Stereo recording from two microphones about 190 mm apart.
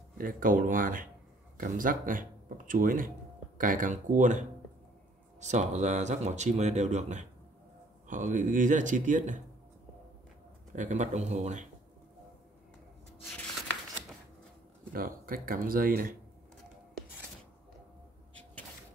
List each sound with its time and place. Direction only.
0.2 s speech: 45° right (ahead or behind)
10.7 s speech: 40° right (ahead or behind)
14.9 s speech: 50° right (ahead or behind)